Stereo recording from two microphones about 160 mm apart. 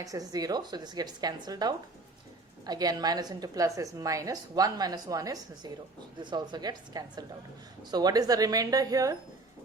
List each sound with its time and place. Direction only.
0.0 s a woman's voice: 20° right (ahead or behind)